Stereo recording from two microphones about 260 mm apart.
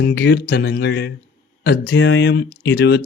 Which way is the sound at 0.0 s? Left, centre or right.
Left.